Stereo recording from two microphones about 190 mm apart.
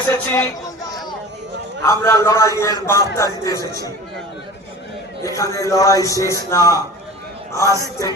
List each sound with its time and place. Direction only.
0.1 s a man's voice: 15° left (ahead or behind)
5.2 s a man's voice: 15° left (ahead or behind)